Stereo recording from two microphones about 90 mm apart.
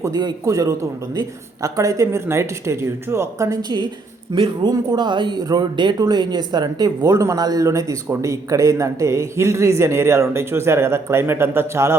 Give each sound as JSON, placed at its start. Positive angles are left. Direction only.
{"t": 0.0, "sound": "speech", "side_deg": -50}
{"t": 0.4, "sound": "a man's voice", "side_deg": -40}
{"t": 4.7, "sound": "a man's voice", "side_deg": -50}